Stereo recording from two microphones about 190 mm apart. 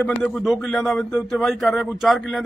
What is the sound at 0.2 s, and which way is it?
Speech, centre (ahead or behind).